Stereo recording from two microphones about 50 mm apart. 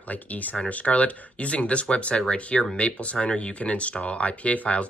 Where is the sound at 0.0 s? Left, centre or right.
Left.